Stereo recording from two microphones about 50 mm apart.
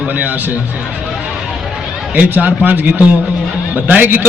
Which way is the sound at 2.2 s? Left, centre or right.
Right.